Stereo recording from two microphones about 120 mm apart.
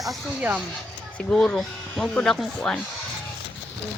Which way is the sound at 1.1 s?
10° left (ahead or behind).